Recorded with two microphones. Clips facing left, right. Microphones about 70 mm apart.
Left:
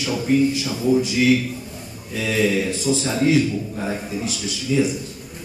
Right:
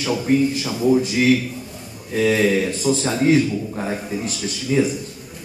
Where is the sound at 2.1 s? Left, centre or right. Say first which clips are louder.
Right 3 dB; right.